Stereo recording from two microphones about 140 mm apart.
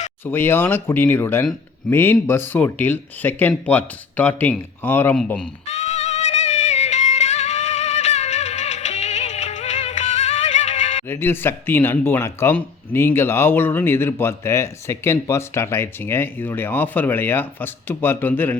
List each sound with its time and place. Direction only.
0.3 s speech: 15° left (ahead or behind)
5.6 s music: 50° left (ahead or behind)
11.1 s speech: 15° left (ahead or behind)